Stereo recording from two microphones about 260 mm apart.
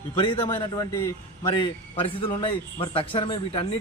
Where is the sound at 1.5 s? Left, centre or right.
Left.